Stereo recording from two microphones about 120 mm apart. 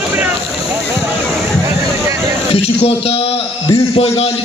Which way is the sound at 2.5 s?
55° left (ahead or behind).